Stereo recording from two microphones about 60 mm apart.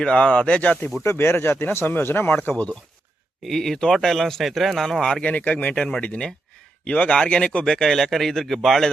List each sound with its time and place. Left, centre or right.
0.0 s speech: centre
1.2 s speech: left
3.4 s speech: centre
5.2 s speech: left; by 8.9 s centre